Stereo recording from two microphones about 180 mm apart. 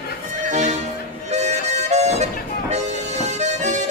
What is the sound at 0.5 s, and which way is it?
Music, 40° right (ahead or behind).